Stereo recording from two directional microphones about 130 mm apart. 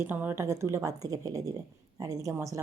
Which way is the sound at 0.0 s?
15° right (ahead or behind).